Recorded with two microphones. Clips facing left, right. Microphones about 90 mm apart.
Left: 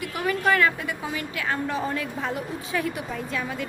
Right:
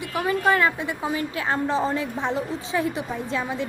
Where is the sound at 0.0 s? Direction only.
25° right (ahead or behind).